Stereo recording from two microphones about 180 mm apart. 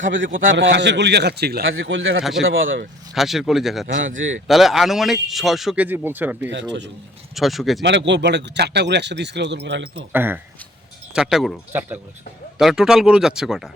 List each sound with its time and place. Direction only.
0.1 s speech: 90° right
0.5 s speech: 80° right
3.2 s a man's voice: centre (ahead or behind)
7.8 s speech: 75° right (ahead or behind)
10.1 s a man's voice: 10° right (ahead or behind)